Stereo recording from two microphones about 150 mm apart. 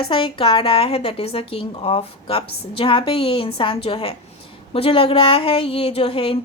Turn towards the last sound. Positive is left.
turn(degrees=40)  # may be behind; listen again after turning